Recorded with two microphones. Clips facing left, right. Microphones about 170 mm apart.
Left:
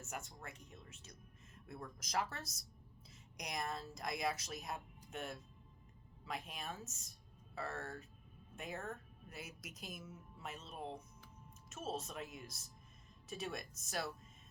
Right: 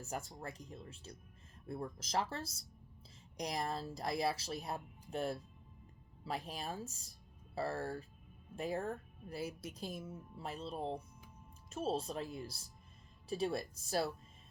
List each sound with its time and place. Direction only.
0.0 s speech: 35° right (ahead or behind)